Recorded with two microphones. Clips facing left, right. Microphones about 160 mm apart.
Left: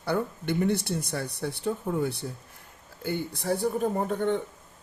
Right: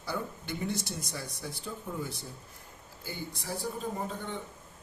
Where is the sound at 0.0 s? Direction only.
60° left (ahead or behind).